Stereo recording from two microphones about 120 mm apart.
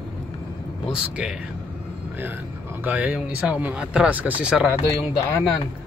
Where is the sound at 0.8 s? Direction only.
5° right (ahead or behind).